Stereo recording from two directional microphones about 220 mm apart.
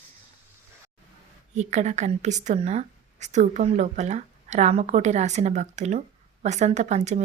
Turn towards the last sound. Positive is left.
turn(degrees=-30)  # may be behind; listen again after turning